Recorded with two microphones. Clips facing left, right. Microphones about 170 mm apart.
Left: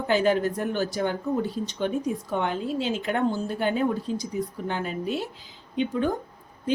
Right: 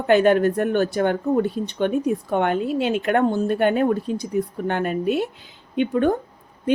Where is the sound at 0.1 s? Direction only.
60° right (ahead or behind).